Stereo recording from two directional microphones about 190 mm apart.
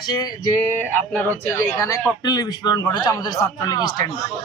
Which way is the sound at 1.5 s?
15° left (ahead or behind).